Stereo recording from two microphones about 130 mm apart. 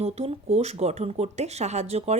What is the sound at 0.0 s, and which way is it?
A woman's voice, 50° right (ahead or behind).